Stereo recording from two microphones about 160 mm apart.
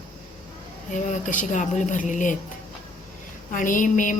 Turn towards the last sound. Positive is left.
turn(degrees=55)  # may be behind; listen again after turning